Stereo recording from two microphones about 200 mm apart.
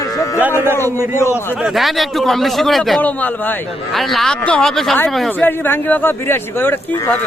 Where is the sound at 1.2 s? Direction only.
10° left (ahead or behind).